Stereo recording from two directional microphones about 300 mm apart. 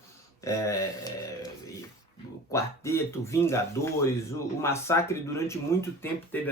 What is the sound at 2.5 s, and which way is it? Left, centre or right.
Speech, centre.